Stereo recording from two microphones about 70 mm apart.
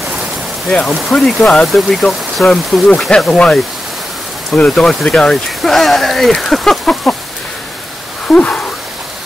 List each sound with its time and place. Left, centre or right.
0.7 s speech: centre
4.7 s speech: centre
8.3 s a sound: centre